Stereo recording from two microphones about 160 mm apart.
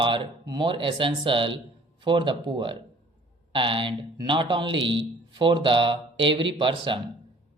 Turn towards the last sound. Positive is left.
turn(degrees=-30)  # may be behind; listen again after turning